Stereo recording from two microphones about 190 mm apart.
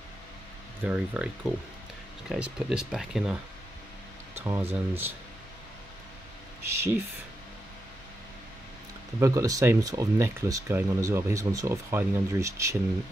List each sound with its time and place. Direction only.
0.8 s speech: 5° right (ahead or behind)
4.4 s speech: 10° right (ahead or behind)
6.6 s speech: 15° right (ahead or behind)
9.2 s speech: 15° right (ahead or behind)